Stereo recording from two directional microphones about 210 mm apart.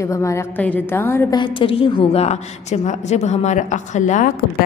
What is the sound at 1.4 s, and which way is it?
A woman's voice, 25° left (ahead or behind).